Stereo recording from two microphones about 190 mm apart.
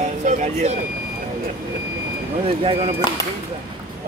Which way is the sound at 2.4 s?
30° right (ahead or behind).